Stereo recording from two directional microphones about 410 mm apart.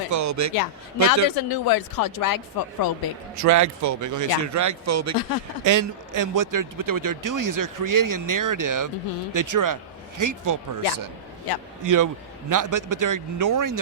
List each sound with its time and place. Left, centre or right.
0.1 s a sound: right
0.5 s speech: left
3.3 s speech: right